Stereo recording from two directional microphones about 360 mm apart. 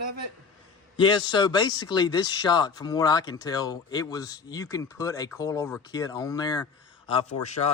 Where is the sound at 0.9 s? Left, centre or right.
Centre.